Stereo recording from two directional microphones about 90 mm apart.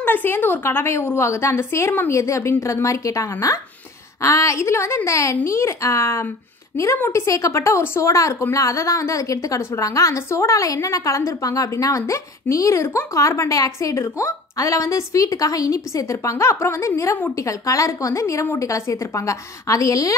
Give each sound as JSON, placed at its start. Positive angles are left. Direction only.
{"t": 0.0, "sound": "a woman's voice", "side_deg": 25}